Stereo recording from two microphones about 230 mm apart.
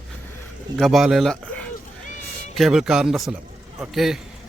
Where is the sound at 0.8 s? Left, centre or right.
Centre.